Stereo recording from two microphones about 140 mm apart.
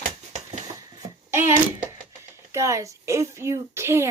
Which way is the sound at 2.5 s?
20° right (ahead or behind).